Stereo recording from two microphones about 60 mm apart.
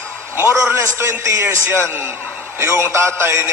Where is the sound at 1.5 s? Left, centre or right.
Right.